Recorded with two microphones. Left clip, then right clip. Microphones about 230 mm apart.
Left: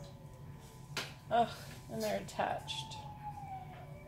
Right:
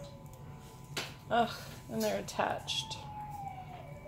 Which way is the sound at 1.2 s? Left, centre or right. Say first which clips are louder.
Right 1 dB; right.